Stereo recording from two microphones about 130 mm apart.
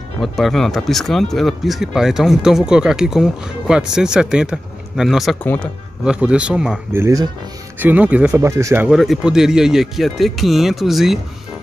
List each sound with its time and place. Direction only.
0.2 s speech: centre (ahead or behind)
5.4 s speech: 10° left (ahead or behind)
6.0 s a man's voice: 10° right (ahead or behind)
6.9 s a man's voice: 20° right (ahead or behind)
8.4 s speech: 20° right (ahead or behind)
8.8 s speech: centre (ahead or behind)